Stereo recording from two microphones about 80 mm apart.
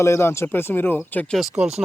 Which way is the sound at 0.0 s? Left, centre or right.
Left.